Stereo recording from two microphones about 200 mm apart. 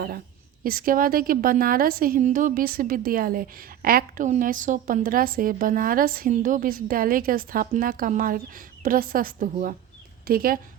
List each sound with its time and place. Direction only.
0.6 s a woman's voice: 45° right (ahead or behind)